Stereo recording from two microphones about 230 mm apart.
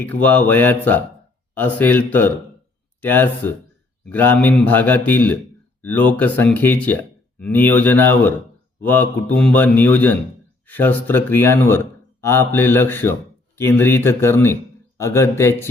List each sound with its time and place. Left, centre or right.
0.0 s speech: centre